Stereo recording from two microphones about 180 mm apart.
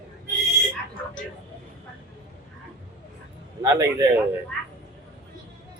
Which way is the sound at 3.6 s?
15° right (ahead or behind).